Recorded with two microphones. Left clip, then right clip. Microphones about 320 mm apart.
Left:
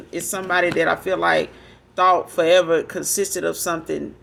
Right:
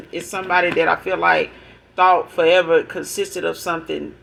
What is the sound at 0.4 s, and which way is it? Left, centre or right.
Speech, left.